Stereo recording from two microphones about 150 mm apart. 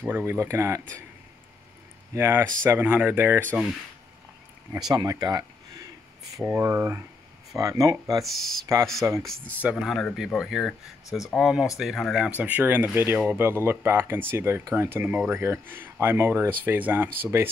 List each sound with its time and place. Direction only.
0.0 s speech: 15° right (ahead or behind)
2.1 s speech: 15° right (ahead or behind)
4.9 s speech: 25° right (ahead or behind)
8.2 s speech: centre (ahead or behind)
9.0 s speech: 15° right (ahead or behind)
9.6 s speech: 5° right (ahead or behind)